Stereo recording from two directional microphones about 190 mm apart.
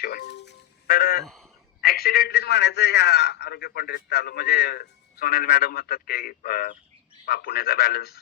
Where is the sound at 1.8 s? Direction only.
55° left (ahead or behind).